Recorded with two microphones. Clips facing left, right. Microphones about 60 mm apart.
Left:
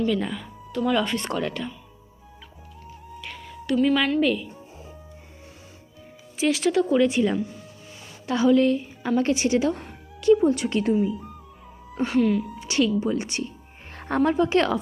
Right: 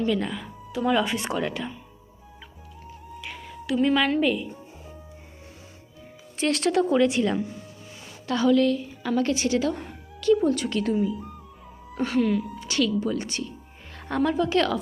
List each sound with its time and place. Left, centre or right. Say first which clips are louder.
0.1 s speech: even; centre
3.1 s music: even; centre
3.8 s speech: even; centre
6.3 s speech: left 1 dB; centre
8.3 s a woman's voice: left 2 dB; centre
11.0 s speech: left 1 dB; centre
12.5 s a woman's voice: left 2 dB; left
13.9 s music: left 3 dB; left
14.3 s a woman's voice: left 2 dB; left